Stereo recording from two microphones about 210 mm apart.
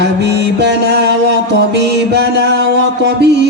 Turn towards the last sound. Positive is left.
turn(degrees=-55)  # may be behind; listen again after turning